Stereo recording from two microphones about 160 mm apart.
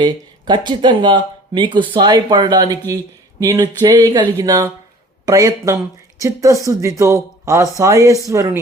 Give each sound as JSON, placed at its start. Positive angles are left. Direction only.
{"t": 0.0, "sound": "speech", "side_deg": -30}